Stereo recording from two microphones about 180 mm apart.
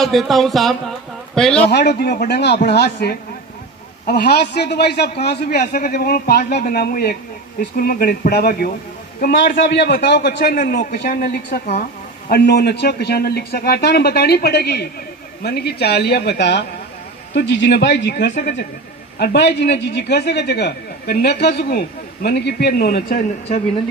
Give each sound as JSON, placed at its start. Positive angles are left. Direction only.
{"t": 0.0, "sound": "speech", "side_deg": 0}
{"t": 1.7, "sound": "a man's voice", "side_deg": 70}
{"t": 5.7, "sound": "a man's voice", "side_deg": 50}